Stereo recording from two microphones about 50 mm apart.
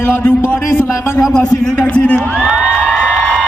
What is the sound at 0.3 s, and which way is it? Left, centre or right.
Speech, left.